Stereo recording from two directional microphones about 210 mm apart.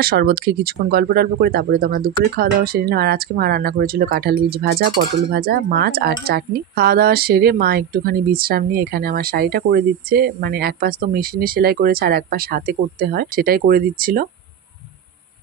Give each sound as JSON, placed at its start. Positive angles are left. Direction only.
{"t": 0.0, "sound": "speech", "side_deg": -45}